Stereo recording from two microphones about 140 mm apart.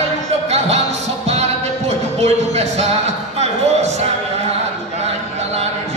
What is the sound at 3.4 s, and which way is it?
Music, 55° right (ahead or behind).